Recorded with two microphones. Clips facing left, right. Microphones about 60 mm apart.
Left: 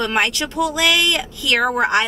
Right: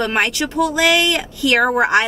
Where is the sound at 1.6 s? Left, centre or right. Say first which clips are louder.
Right 2 dB; centre.